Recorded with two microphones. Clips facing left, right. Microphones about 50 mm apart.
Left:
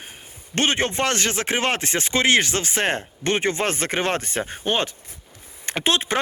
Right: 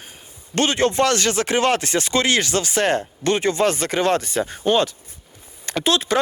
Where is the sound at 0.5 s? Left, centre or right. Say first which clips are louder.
Right 3 dB; left.